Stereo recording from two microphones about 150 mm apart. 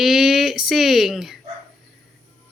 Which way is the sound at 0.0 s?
Centre (ahead or behind).